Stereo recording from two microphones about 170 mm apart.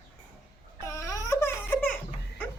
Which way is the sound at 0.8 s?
20° left (ahead or behind).